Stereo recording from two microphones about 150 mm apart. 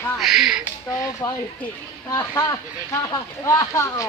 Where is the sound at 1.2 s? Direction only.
20° left (ahead or behind).